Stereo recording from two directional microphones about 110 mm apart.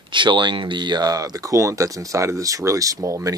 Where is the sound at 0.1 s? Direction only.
45° right (ahead or behind).